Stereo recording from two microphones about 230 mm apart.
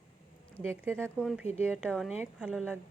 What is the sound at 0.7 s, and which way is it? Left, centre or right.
Speech, centre.